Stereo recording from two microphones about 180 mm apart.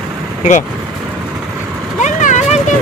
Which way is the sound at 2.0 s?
40° left (ahead or behind).